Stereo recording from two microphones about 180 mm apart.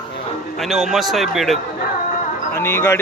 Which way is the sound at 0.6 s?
Centre (ahead or behind).